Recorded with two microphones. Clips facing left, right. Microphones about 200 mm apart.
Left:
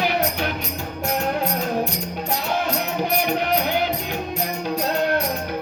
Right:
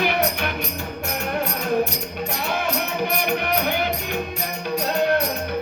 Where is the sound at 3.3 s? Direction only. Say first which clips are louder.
Left 1 dB; 55° right (ahead or behind).